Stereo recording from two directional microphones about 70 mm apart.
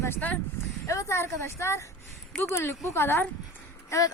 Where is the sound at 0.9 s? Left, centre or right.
Left.